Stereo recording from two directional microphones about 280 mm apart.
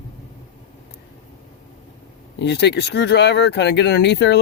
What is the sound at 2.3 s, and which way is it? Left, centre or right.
Speech, left.